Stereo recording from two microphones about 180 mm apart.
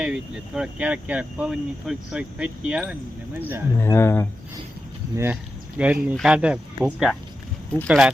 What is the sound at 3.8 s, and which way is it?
Speech, 15° left (ahead or behind).